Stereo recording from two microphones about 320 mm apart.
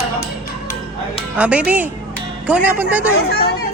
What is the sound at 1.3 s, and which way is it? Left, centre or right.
Speech, centre.